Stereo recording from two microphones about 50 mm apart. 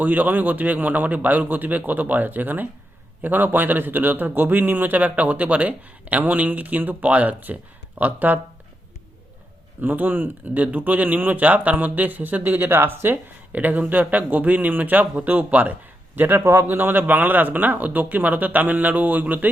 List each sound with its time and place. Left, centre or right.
0.0 s a man's voice: right
9.8 s a man's voice: right
13.5 s a man's voice: right